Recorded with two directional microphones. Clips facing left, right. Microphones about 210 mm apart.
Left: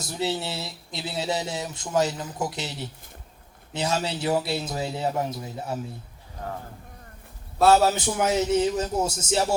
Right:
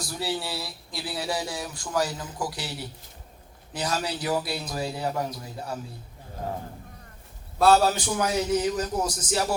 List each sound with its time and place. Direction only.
0.0 s speech: 20° left (ahead or behind)
7.7 s speech: 25° left (ahead or behind)